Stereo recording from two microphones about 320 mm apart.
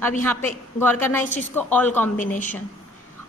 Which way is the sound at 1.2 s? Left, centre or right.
Left.